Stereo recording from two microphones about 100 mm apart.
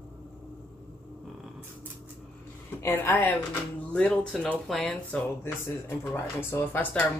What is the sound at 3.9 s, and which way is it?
Speech, 10° left (ahead or behind).